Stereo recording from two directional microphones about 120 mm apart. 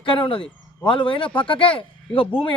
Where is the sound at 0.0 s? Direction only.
45° left (ahead or behind).